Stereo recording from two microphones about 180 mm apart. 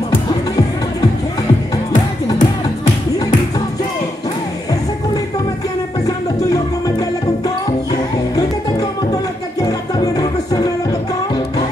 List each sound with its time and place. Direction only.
2.3 s music: 45° left (ahead or behind)
7.4 s music: 20° left (ahead or behind)